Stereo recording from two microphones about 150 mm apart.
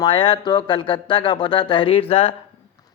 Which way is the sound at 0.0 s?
35° left (ahead or behind).